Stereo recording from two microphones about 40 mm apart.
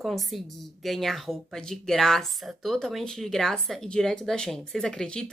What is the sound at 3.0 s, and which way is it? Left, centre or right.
A woman's voice, centre.